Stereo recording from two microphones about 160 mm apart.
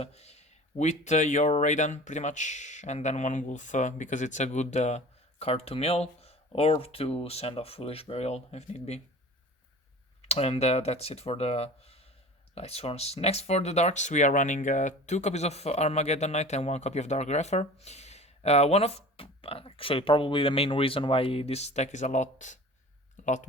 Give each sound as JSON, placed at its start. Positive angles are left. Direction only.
{"t": 0.0, "sound": "speech", "side_deg": 40}
{"t": 10.2, "sound": "speech", "side_deg": 40}
{"t": 23.2, "sound": "a sound", "side_deg": 50}